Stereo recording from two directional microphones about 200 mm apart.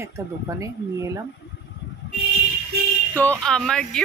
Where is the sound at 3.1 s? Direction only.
10° left (ahead or behind).